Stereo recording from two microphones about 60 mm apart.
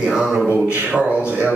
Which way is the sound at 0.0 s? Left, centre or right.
Centre.